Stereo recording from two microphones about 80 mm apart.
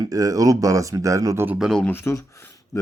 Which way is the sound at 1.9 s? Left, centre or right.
Left.